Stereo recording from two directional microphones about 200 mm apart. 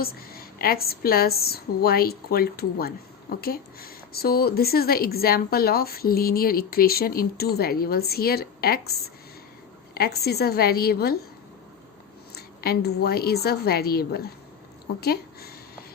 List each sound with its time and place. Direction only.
0.0 s a woman's voice: 50° left (ahead or behind)
12.3 s a woman's voice: 50° left (ahead or behind)